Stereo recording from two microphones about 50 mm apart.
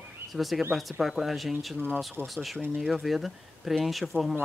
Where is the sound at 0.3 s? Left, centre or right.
Centre.